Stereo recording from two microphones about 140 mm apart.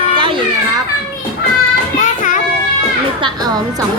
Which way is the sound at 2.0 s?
65° left (ahead or behind).